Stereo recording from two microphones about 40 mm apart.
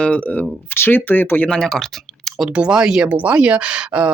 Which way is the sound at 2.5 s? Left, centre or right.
Right.